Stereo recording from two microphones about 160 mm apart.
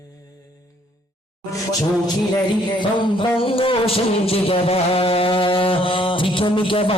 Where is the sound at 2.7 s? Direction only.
30° left (ahead or behind).